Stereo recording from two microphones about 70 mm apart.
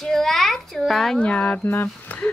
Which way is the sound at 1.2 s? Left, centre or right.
Centre.